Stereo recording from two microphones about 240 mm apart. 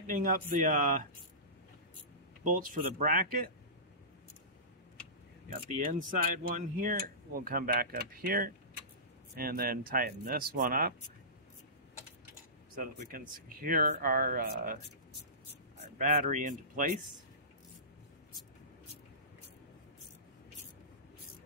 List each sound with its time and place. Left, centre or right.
0.0 s speech: right
2.4 s speech: right
5.7 s speech: right
12.7 s speech: right
15.8 s speech: right